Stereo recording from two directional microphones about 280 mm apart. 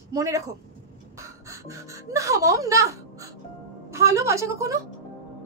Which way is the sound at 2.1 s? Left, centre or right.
Centre.